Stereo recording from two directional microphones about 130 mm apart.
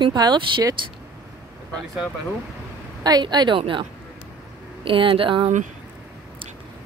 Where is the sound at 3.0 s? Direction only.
30° right (ahead or behind).